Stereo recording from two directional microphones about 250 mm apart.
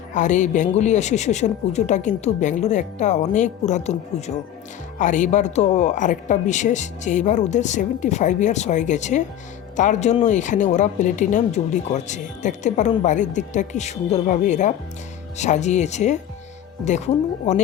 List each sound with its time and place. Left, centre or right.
0.1 s speech: left